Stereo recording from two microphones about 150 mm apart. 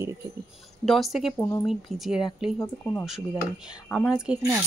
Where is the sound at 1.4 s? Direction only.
15° left (ahead or behind).